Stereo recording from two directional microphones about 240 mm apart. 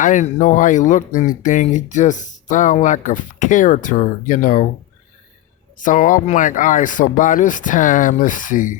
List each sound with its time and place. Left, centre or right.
0.0 s speech: left
5.7 s speech: left